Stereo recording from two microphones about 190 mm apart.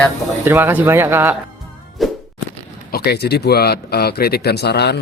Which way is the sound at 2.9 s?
55° left (ahead or behind).